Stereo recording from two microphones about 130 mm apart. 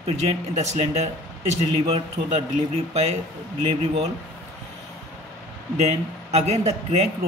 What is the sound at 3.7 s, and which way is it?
Speech, 55° right (ahead or behind).